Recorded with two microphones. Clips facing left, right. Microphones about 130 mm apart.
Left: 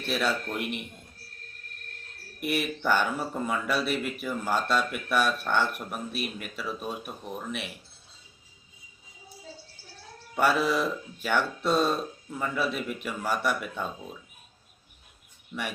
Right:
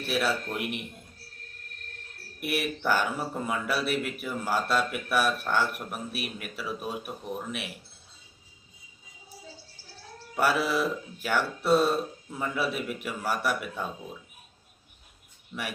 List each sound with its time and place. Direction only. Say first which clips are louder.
0.0 s speech: even; 5° right (ahead or behind)
2.4 s speech: left 1 dB; 5° right (ahead or behind)
10.3 s speech: left 1 dB; 5° right (ahead or behind)